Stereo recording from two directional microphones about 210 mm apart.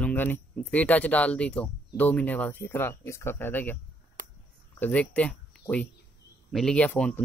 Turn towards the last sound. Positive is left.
turn(degrees=5)  # may be behind; listen again after turning